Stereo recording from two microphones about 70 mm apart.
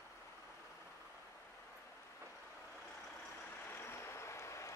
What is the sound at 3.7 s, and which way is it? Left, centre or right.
Vehicle, left.